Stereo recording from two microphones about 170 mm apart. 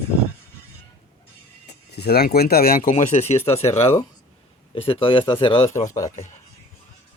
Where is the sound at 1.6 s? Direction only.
75° left (ahead or behind); by 5.6 s 30° left (ahead or behind).